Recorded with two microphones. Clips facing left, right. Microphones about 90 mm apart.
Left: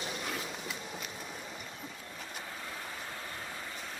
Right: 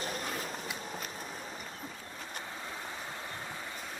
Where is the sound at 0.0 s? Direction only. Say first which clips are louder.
Right 1 dB; 40° right (ahead or behind).